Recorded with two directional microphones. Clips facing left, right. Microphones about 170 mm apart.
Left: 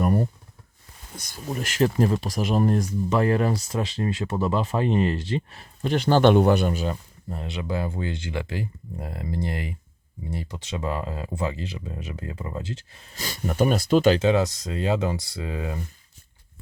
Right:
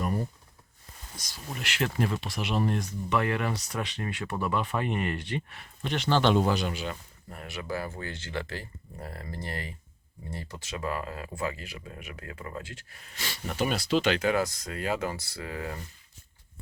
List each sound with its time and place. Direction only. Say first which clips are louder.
0.0 s a sound: left 8 dB; 60° left (ahead or behind)
1.5 s speech: left 8 dB; 40° left (ahead or behind)
7.3 s speech: left 5 dB; 20° left (ahead or behind)
13.1 s speech: left 7 dB; 40° left (ahead or behind)
14.2 s speech: left 6 dB; 25° left (ahead or behind)